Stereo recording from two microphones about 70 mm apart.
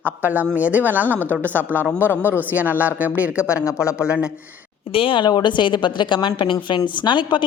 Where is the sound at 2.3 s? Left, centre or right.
Right.